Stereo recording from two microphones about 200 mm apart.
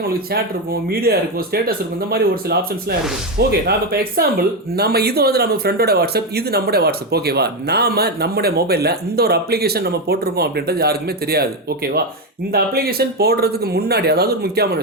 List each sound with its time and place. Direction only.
0.9 s speech: 50° right (ahead or behind)
3.7 s speech: 50° right (ahead or behind)
12.5 s speech: 50° right (ahead or behind)